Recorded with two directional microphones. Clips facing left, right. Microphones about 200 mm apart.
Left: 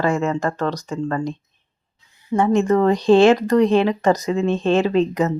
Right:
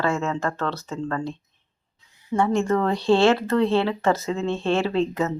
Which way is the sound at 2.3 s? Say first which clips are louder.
Left 5 dB; 20° left (ahead or behind).